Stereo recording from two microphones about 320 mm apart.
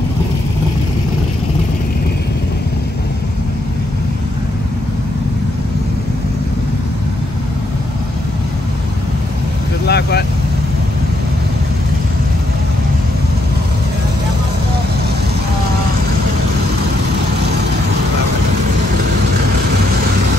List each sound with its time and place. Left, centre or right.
9.8 s vehicle: left